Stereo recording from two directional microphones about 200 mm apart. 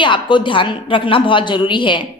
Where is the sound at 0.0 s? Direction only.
25° left (ahead or behind).